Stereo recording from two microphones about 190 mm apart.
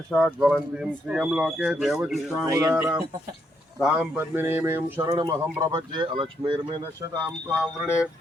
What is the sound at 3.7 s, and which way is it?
Speech, centre (ahead or behind).